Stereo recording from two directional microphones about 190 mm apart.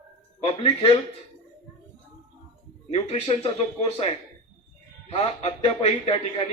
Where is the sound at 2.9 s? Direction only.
30° left (ahead or behind).